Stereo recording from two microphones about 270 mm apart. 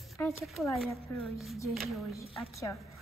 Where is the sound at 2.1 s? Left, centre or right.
Centre.